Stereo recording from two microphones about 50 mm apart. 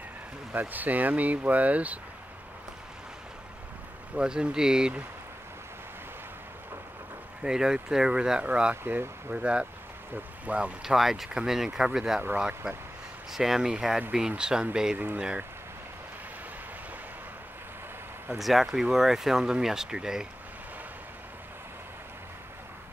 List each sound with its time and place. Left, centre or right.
0.5 s speech: right
4.2 s speech: centre
7.4 s speech: centre
8.8 s speech: right
9.3 s speech: right
10.8 s speech: centre
18.4 s speech: centre